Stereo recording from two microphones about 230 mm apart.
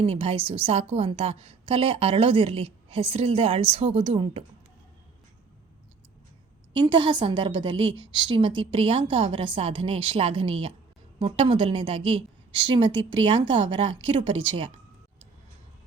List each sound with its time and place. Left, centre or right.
0.0 s a woman's voice: right
6.7 s a woman's voice: right